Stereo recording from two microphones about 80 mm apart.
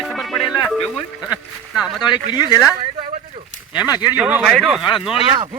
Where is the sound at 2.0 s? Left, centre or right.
Left.